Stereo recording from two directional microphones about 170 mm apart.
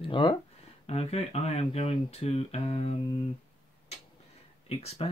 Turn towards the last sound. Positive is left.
turn(degrees=35)  # may be behind; listen again after turning